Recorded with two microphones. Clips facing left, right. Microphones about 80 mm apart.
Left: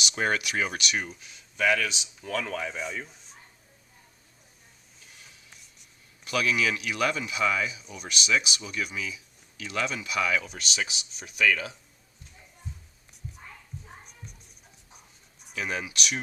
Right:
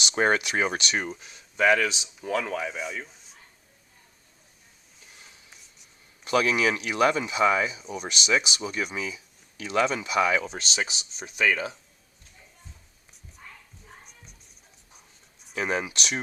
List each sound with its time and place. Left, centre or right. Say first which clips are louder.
0.0 s speech: right 4 dB; right
2.2 s speech: right 3 dB; centre
6.2 s speech: right 4 dB; right
14.0 s music: left 3 dB; centre
15.5 s speech: right 4 dB; right